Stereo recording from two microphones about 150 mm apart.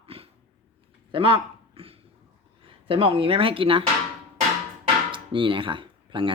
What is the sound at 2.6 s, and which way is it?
Speech, 35° right (ahead or behind).